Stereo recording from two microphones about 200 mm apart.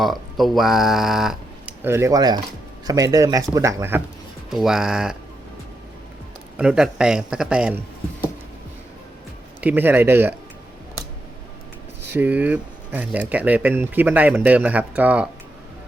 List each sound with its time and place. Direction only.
0.0 s speech: centre (ahead or behind)
4.4 s a man's voice: centre (ahead or behind)
6.6 s a man's voice: 5° right (ahead or behind)
9.6 s speech: 10° right (ahead or behind)
12.1 s speech: 10° right (ahead or behind)